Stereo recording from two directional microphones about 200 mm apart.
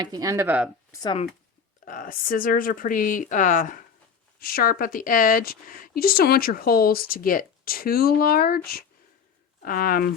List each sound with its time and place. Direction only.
0.0 s speech: 20° right (ahead or behind)
0.9 s speech: 20° left (ahead or behind)
1.8 s speech: 45° left (ahead or behind)